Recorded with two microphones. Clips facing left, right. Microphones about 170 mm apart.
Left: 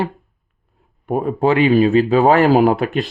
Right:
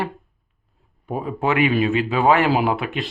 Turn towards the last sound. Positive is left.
turn(degrees=40)  # may be behind; listen again after turning